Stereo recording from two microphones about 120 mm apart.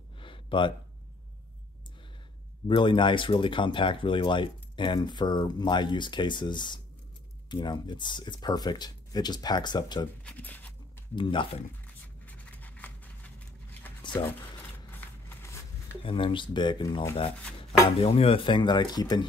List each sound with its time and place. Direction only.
0.2 s a sound: 45° left (ahead or behind)
2.7 s speech: 45° left (ahead or behind)
10.2 s speech: 15° left (ahead or behind)
11.1 s speech: 45° left (ahead or behind)
12.3 s a sound: 15° left (ahead or behind)
16.0 s speech: 45° left (ahead or behind)
17.8 s speech: 55° left (ahead or behind); by 19.2 s 35° left (ahead or behind)